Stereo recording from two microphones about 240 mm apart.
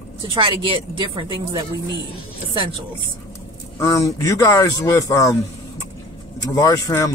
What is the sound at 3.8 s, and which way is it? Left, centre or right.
Speech, centre.